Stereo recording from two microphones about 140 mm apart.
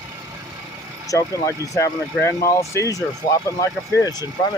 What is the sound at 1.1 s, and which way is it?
Speech, 20° left (ahead or behind).